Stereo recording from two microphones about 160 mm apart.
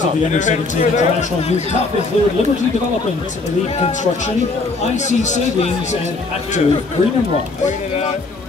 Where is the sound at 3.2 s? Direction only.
45° left (ahead or behind).